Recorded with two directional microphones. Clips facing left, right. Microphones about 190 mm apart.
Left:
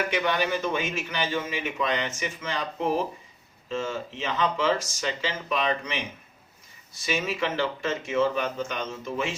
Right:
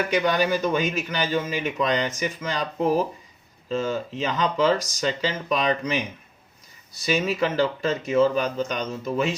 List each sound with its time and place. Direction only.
0.1 s a man's voice: 35° right (ahead or behind)
3.7 s a man's voice: 35° right (ahead or behind)